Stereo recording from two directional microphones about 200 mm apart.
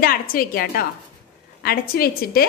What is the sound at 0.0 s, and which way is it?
A woman's voice, 45° left (ahead or behind).